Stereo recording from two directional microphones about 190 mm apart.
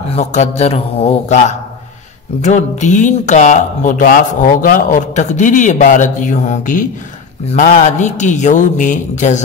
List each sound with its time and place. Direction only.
0.1 s speech: 35° left (ahead or behind)
2.4 s speech: 40° left (ahead or behind)